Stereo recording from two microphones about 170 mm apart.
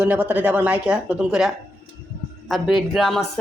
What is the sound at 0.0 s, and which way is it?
Speech, 10° right (ahead or behind).